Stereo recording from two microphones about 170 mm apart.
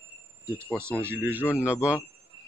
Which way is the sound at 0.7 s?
15° right (ahead or behind).